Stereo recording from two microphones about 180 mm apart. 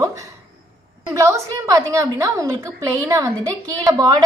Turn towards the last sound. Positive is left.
turn(degrees=-20)  # may be behind; listen again after turning